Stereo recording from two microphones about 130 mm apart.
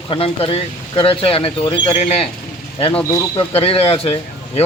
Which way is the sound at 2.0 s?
55° left (ahead or behind).